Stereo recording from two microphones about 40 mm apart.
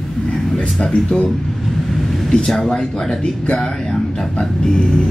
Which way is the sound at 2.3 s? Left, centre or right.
Centre.